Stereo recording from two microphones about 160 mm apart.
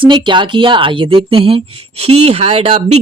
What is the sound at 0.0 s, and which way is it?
A woman's voice, 30° right (ahead or behind).